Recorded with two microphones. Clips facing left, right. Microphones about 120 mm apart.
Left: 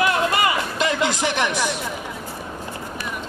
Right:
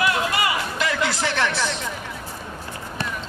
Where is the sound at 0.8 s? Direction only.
20° left (ahead or behind).